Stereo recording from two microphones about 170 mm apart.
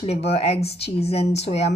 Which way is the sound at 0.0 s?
35° left (ahead or behind).